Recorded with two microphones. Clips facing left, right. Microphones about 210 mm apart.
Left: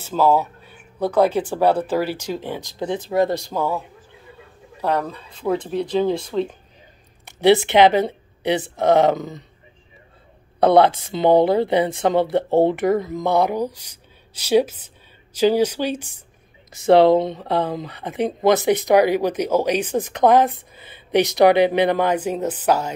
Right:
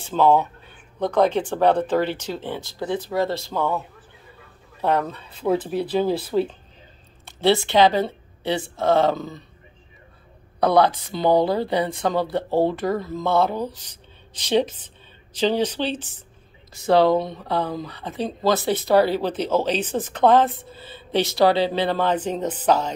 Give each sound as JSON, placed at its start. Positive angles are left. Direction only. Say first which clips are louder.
{"t": 0.1, "sound": "speech", "louder": "even", "side_deg": 5}
{"t": 4.8, "sound": "speech", "louder": "even", "side_deg": 0}
{"t": 7.2, "sound": "speech", "louder": "left 4 dB", "side_deg": 15}
{"t": 10.6, "sound": "speech", "louder": "left 4 dB", "side_deg": 25}
{"t": 16.7, "sound": "speech", "louder": "left 4 dB", "side_deg": 25}